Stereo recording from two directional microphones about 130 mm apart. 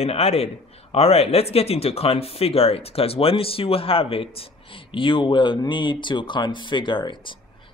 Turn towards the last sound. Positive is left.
turn(degrees=35)  # may be behind; listen again after turning